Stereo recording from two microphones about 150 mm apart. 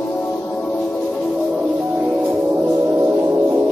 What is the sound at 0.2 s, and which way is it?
Music, 15° left (ahead or behind).